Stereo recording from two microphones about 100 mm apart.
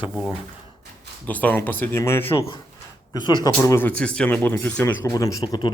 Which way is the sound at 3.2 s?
45° left (ahead or behind).